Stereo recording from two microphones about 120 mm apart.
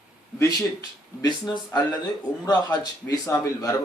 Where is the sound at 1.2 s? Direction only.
35° left (ahead or behind).